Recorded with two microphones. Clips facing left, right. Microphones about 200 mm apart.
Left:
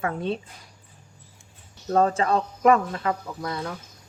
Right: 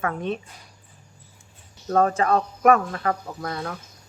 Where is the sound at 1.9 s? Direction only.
30° left (ahead or behind).